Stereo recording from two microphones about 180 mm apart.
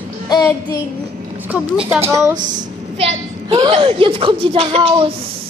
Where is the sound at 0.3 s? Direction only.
20° left (ahead or behind).